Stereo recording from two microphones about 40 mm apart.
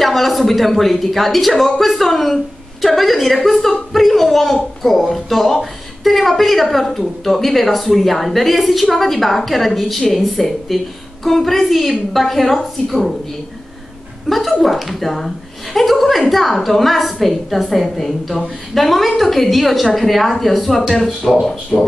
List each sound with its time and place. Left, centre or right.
0.0 s a woman's voice: centre
14.3 s a woman's voice: centre